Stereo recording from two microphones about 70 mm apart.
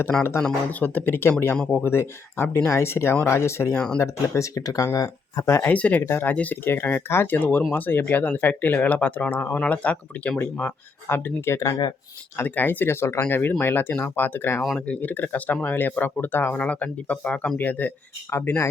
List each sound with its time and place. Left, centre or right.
0.2 s speech: left
1.5 s speech: centre
1.8 s speech: left
3.8 s speech: centre
4.0 s speech: left
5.5 s speech: left
5.7 s speech: centre
6.1 s speech: left
6.3 s speech: left
6.7 s speech: left
11.1 s speech: left
12.4 s speech: left
18.3 s speech: left